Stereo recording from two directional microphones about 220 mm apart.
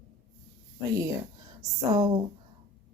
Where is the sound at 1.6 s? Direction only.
15° right (ahead or behind).